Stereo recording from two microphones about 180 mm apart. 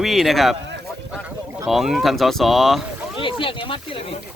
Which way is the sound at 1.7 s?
Centre (ahead or behind).